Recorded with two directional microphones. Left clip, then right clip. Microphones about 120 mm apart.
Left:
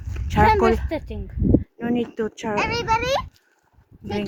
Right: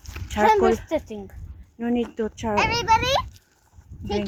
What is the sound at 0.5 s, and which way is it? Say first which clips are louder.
Speech: even; 35° left (ahead or behind).